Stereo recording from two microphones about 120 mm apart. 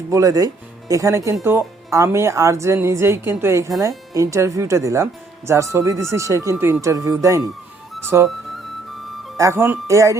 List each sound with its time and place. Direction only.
0.1 s speech: 30° right (ahead or behind)
9.4 s speech: 20° right (ahead or behind)